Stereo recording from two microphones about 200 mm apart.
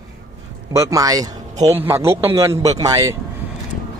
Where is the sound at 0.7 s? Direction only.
15° right (ahead or behind).